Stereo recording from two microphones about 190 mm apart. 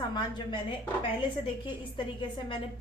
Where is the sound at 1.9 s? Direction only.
25° left (ahead or behind).